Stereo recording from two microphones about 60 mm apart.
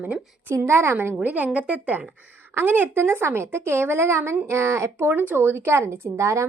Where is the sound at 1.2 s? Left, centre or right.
Right.